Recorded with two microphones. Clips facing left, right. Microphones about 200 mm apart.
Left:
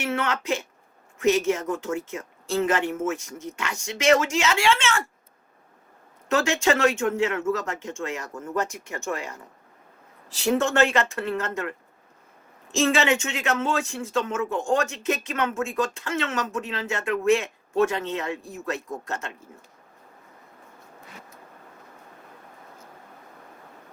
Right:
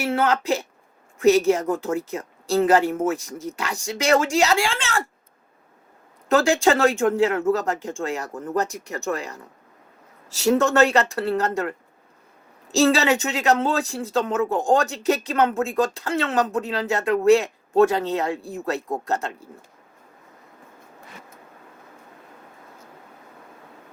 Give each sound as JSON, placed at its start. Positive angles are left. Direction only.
{"t": 0.0, "sound": "speech", "side_deg": -35}
{"t": 6.2, "sound": "speech", "side_deg": -35}
{"t": 12.7, "sound": "speech", "side_deg": -35}